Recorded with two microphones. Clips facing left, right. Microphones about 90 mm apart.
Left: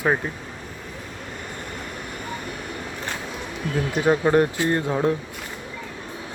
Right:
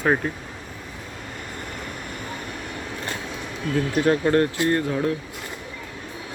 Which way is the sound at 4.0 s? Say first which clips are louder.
Left 1 dB; 15° left (ahead or behind).